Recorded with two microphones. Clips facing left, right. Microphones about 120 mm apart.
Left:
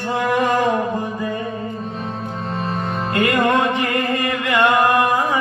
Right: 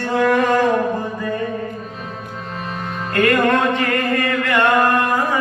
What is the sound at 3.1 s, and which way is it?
Music, 15° left (ahead or behind).